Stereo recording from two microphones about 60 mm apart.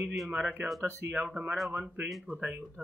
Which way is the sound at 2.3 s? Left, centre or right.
Right.